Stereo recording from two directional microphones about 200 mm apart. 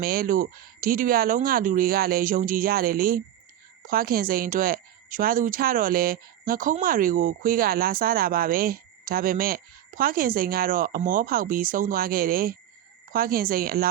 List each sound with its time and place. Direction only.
0.0 s a woman's voice: 45° right (ahead or behind)